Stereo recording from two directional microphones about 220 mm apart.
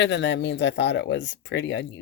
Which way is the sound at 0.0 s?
55° left (ahead or behind).